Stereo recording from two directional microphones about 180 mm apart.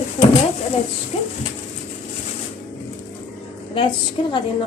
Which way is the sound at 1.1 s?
35° left (ahead or behind).